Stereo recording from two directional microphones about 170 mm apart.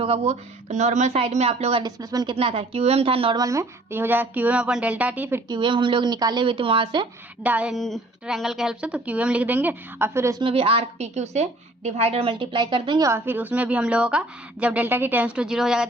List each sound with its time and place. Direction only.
0.0 s a woman's voice: 35° right (ahead or behind)
1.8 s speech: 20° right (ahead or behind)
2.3 s a woman's voice: 35° right (ahead or behind)
3.4 s a woman's voice: 15° right (ahead or behind)
5.5 s speech: 30° right (ahead or behind)
7.4 s a woman's voice: 10° right (ahead or behind)
10.4 s a woman's voice: 30° right (ahead or behind)
13.1 s a woman's voice: 15° right (ahead or behind)